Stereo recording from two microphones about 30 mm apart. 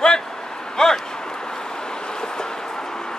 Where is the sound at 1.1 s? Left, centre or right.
Left.